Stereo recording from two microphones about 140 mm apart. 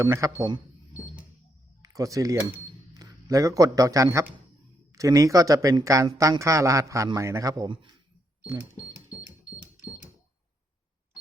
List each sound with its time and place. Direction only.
0.0 s speech: 20° right (ahead or behind)
1.8 s speech: 25° right (ahead or behind)